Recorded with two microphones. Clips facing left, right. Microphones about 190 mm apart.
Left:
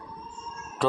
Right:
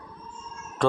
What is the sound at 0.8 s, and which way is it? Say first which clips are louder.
Speech: right 2 dB; 5° left (ahead or behind).